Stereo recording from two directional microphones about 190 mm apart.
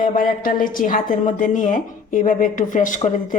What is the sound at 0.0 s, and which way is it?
A woman's voice, 45° left (ahead or behind).